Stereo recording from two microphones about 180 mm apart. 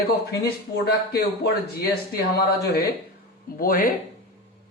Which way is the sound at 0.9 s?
60° left (ahead or behind).